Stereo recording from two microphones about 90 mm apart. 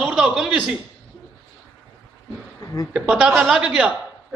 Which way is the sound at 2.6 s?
35° left (ahead or behind).